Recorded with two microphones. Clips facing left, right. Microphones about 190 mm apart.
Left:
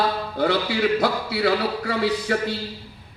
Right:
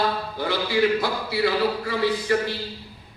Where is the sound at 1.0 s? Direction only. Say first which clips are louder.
Left 2 dB; 65° left (ahead or behind).